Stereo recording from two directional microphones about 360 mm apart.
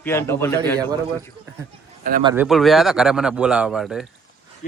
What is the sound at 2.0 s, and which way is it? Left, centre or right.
Speech, right.